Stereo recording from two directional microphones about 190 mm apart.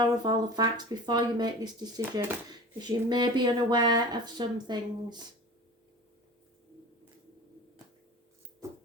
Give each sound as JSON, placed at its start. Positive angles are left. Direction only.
{"t": 0.0, "sound": "speech", "side_deg": -25}
{"t": 8.6, "sound": "music", "side_deg": -15}